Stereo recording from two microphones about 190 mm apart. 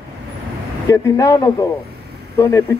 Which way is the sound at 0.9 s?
15° left (ahead or behind).